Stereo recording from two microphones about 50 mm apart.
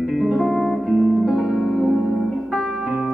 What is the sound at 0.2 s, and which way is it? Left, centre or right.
Music, centre.